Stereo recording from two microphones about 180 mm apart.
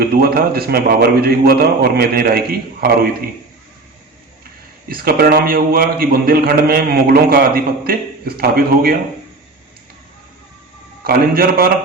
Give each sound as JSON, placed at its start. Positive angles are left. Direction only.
{"t": 0.0, "sound": "a man's voice", "side_deg": -55}
{"t": 4.9, "sound": "a man's voice", "side_deg": -55}
{"t": 11.0, "sound": "a man's voice", "side_deg": -55}